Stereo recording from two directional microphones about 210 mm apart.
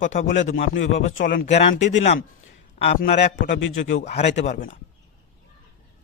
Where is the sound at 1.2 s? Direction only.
40° left (ahead or behind).